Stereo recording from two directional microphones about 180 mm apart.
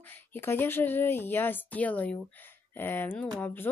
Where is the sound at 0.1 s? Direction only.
10° left (ahead or behind).